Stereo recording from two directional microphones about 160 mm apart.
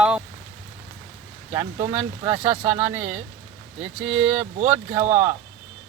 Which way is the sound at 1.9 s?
10° right (ahead or behind).